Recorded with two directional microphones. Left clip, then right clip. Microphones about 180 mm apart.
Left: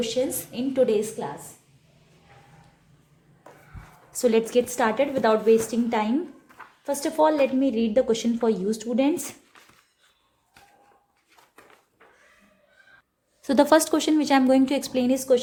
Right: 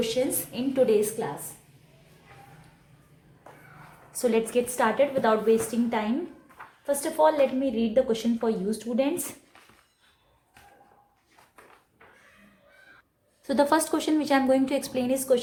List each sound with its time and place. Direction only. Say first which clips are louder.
0.3 s a woman's voice: left 2 dB; 20° left (ahead or behind)
4.1 s a woman's voice: left 4 dB; 35° left (ahead or behind)
13.4 s a woman's voice: left 4 dB; 40° left (ahead or behind)